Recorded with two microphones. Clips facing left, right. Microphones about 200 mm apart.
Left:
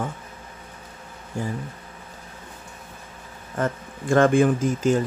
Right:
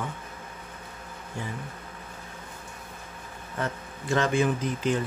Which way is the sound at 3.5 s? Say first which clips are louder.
Left 6 dB; 50° left (ahead or behind).